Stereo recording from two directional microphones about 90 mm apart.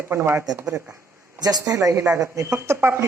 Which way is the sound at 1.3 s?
45° right (ahead or behind).